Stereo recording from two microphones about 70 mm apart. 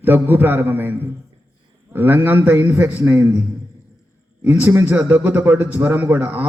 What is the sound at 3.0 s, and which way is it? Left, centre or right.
Speech, right.